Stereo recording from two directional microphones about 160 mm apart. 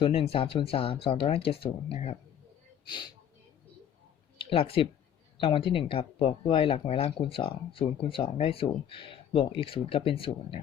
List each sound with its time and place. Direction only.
0.0 s speech: 35° left (ahead or behind)
4.4 s speech: 35° left (ahead or behind)